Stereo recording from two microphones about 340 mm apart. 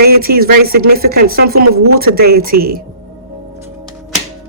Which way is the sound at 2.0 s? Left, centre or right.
Right.